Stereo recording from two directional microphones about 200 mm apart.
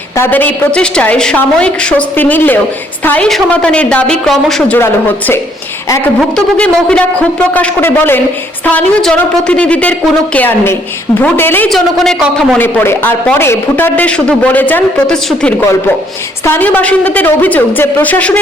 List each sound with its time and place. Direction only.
0.2 s a man's voice: 10° left (ahead or behind)